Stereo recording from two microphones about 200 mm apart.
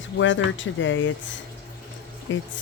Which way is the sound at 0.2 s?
70° left (ahead or behind).